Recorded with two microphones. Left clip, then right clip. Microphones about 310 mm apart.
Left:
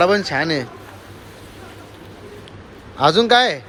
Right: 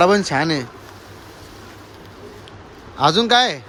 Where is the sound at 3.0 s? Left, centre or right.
Centre.